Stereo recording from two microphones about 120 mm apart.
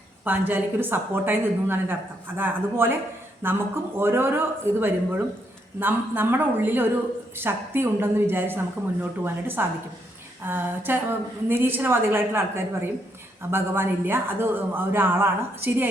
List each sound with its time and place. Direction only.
0.3 s speech: 15° right (ahead or behind)